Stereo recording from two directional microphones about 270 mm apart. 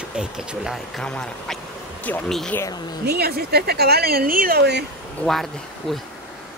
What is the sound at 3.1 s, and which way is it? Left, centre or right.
Speech, right.